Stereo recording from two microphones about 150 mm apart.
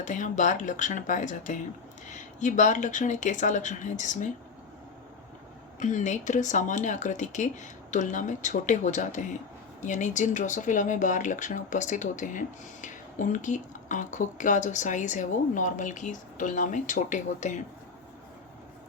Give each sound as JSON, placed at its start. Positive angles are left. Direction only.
{"t": 0.0, "sound": "speech", "side_deg": 55}
{"t": 5.8, "sound": "speech", "side_deg": 55}